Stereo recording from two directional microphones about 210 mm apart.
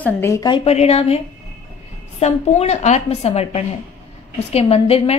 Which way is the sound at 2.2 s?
30° left (ahead or behind).